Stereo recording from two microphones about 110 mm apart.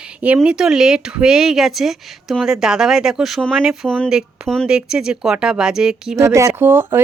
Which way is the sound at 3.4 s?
5° left (ahead or behind).